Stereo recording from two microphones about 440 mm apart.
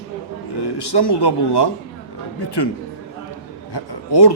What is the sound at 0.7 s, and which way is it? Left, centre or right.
Speech, left.